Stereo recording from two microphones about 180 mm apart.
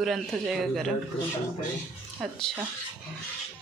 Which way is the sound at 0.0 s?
Centre (ahead or behind).